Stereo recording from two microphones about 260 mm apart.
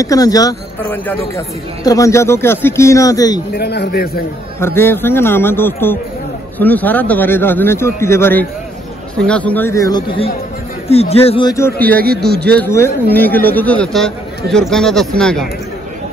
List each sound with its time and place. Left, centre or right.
0.0 s speech: centre
3.5 s a man's voice: left
4.6 s speech: centre